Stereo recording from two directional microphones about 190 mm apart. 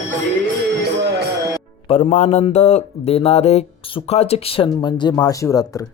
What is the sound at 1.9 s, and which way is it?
Speech, 35° left (ahead or behind).